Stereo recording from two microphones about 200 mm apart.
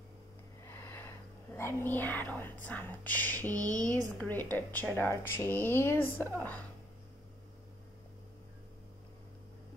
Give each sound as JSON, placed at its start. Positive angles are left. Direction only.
{"t": 0.7, "sound": "speech", "side_deg": 10}
{"t": 3.5, "sound": "speech", "side_deg": -15}
{"t": 4.2, "sound": "speech", "side_deg": 10}